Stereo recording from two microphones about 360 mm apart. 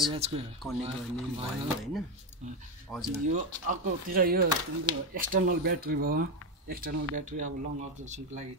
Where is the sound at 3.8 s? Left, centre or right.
Right.